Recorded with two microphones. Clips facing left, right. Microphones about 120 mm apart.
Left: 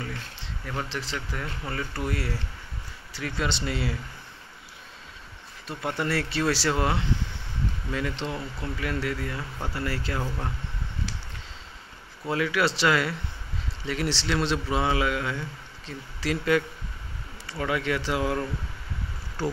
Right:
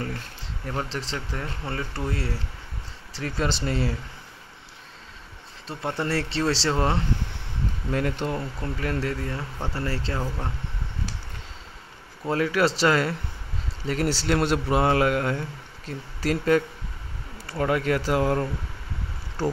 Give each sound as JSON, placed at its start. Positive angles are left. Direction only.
{"t": 0.7, "sound": "speech", "side_deg": -35}
{"t": 5.7, "sound": "speech", "side_deg": -30}
{"t": 7.9, "sound": "speech", "side_deg": -50}
{"t": 12.3, "sound": "speech", "side_deg": -40}